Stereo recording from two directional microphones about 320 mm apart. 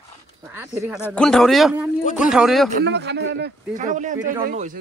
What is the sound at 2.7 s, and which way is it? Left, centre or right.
A man's voice, right.